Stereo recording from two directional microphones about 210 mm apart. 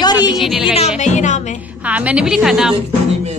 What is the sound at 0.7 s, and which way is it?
Music, 30° left (ahead or behind).